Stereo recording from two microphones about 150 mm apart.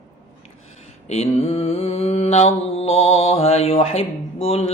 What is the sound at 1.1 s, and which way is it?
Mantra, 45° left (ahead or behind).